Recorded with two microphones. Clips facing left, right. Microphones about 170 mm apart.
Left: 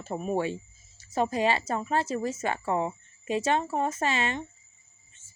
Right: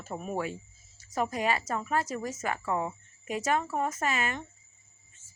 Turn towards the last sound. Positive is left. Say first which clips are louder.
# left 3 dB
turn(degrees=30)  # may be behind; listen again after turning